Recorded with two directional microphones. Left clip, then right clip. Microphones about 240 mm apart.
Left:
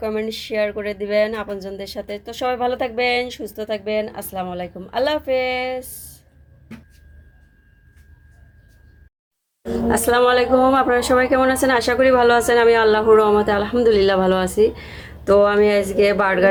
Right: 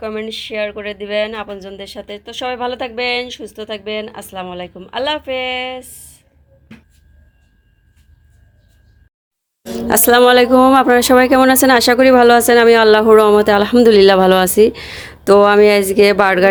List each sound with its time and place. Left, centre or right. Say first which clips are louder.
0.0 s speech: right 1 dB; centre
9.9 s speech: right 7 dB; right